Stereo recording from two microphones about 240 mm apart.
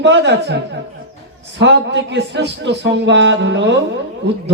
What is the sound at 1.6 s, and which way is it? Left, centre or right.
A man's voice, right.